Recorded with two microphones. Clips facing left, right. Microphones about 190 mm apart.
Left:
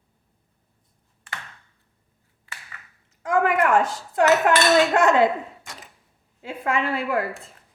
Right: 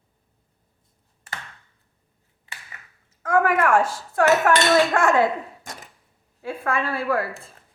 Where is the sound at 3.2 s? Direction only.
20° left (ahead or behind).